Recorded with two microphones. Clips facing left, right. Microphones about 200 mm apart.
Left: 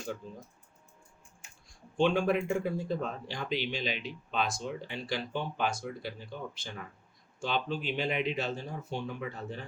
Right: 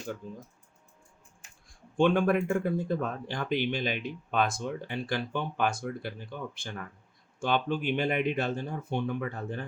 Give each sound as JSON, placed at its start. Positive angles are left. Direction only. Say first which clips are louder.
{"t": 2.0, "sound": "speech", "louder": "right 3 dB", "side_deg": -55}